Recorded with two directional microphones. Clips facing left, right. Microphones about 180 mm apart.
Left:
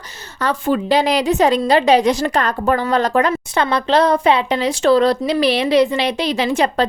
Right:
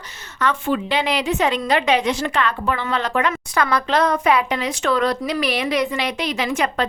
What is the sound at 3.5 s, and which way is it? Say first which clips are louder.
Speech: left 3 dB; 25° left (ahead or behind).